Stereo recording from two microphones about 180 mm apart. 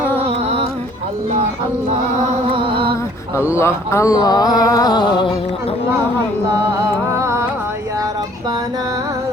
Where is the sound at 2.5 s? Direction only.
30° right (ahead or behind).